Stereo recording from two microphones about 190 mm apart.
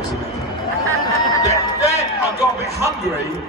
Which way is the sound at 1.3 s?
15° left (ahead or behind).